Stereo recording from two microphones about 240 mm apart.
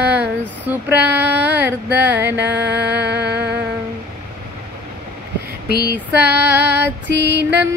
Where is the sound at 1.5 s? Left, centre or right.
Right.